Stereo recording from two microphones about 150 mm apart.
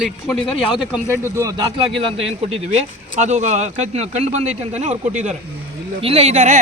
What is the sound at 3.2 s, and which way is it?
Speech, 50° right (ahead or behind).